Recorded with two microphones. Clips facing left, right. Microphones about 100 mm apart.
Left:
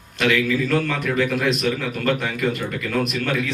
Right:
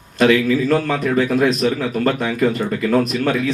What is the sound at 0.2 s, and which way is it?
Speech, 35° right (ahead or behind).